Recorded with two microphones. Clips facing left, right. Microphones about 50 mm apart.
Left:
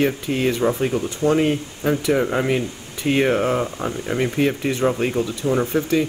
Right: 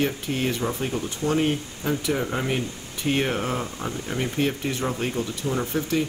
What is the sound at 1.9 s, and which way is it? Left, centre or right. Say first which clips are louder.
Speech: left 6 dB; left.